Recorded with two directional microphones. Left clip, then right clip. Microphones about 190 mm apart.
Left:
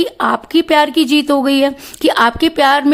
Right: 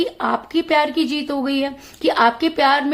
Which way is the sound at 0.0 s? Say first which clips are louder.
Left 5 dB; 50° left (ahead or behind).